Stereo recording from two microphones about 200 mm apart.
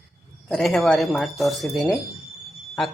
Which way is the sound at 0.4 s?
Centre (ahead or behind).